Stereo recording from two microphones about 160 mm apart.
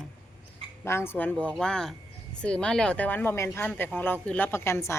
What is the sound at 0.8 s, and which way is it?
Speech, 15° left (ahead or behind).